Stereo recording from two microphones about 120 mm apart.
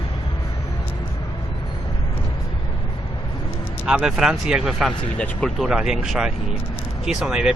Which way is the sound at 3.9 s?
5° right (ahead or behind).